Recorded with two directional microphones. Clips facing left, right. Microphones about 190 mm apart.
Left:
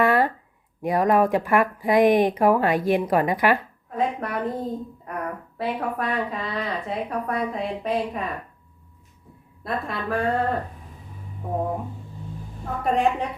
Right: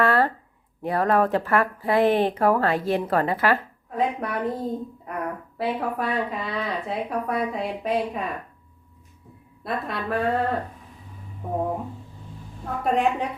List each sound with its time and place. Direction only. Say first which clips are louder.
0.0 s a sound: left 1 dB; 15° left (ahead or behind)
0.8 s speech: left 2 dB; 15° left (ahead or behind)
3.8 s speech: even; centre (ahead or behind)
9.6 s speech: even; centre (ahead or behind)
12.8 s speech: left 1 dB; centre (ahead or behind)